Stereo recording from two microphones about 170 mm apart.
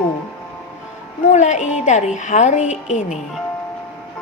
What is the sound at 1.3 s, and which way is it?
Speech, 45° left (ahead or behind).